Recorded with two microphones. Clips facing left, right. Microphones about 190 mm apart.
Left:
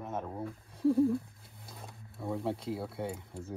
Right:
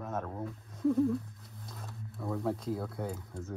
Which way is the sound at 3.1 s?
30° left (ahead or behind).